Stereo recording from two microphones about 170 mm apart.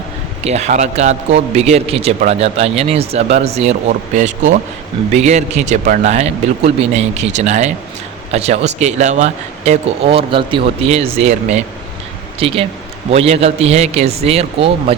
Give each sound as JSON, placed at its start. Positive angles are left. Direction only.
{"t": 0.4, "sound": "a man's voice", "side_deg": -40}